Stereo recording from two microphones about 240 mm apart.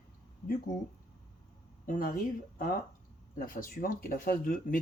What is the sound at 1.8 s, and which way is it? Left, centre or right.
Speech, left.